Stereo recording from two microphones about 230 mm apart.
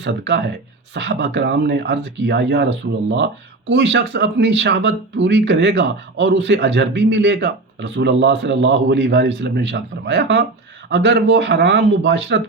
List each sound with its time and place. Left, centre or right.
0.0 s speech: right
3.7 s speech: right